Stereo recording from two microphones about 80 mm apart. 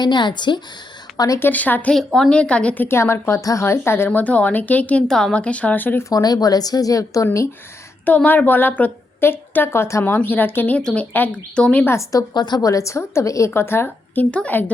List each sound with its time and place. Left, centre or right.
0.0 s a woman's voice: left
1.1 s speech: left
1.4 s a woman's voice: left
2.8 s a woman's voice: left
4.2 s a woman's voice: centre
5.0 s a woman's voice: centre; by 6.0 s left
6.0 s speech: left
8.0 s a woman's voice: centre
11.9 s a woman's voice: left
12.3 s a woman's voice: left
12.6 s a woman's voice: left; by 14.6 s centre